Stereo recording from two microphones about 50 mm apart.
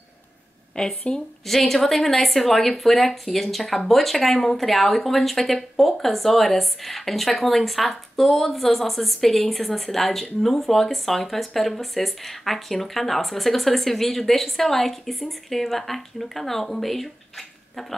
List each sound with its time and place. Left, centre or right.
0.7 s speech: centre
1.4 s speech: centre